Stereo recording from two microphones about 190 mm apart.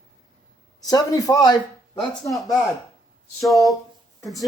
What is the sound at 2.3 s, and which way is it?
Speech, centre (ahead or behind).